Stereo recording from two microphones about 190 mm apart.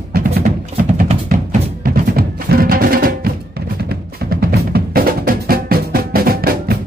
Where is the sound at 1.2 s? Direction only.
50° right (ahead or behind).